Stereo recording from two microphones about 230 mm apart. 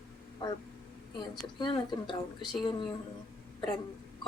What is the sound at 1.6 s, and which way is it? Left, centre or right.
Speech, left.